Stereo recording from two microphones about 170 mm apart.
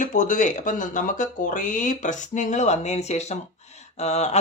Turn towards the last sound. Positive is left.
turn(degrees=40)  # may be behind; listen again after turning